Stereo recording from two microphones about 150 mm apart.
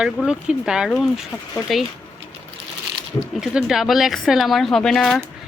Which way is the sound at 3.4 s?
5° right (ahead or behind).